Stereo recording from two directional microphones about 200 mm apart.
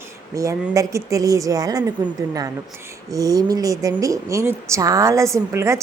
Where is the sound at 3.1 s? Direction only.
15° right (ahead or behind).